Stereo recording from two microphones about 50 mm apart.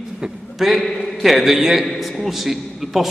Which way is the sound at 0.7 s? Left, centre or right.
Centre.